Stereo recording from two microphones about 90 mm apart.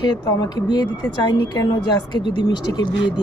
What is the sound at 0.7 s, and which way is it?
A man's voice, 50° left (ahead or behind).